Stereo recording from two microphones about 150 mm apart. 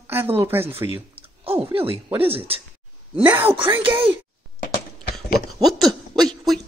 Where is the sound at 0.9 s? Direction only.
40° right (ahead or behind).